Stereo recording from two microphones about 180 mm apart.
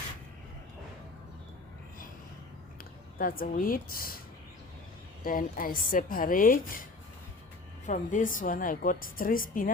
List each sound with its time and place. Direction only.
3.2 s a woman's voice: 55° left (ahead or behind)
5.2 s a woman's voice: 50° left (ahead or behind)
7.9 s a woman's voice: 45° left (ahead or behind)